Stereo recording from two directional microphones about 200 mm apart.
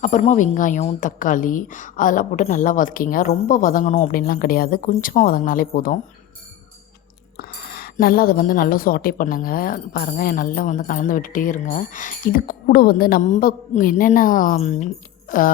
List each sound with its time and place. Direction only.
0.0 s a woman's voice: 35° left (ahead or behind)
7.3 s a woman's voice: 45° left (ahead or behind)